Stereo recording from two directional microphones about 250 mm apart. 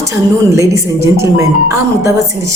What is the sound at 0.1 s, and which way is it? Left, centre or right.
A woman's voice, centre.